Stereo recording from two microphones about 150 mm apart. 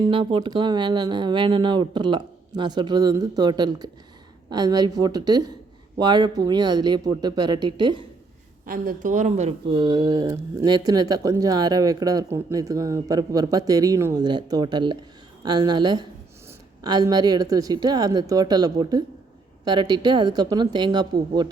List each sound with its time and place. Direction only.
0.1 s speech: 35° right (ahead or behind)
8.6 s a woman's voice: 65° right (ahead or behind)
9.6 s speech: 35° right (ahead or behind)